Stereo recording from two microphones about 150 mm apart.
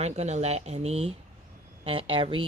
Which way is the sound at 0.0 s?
45° right (ahead or behind).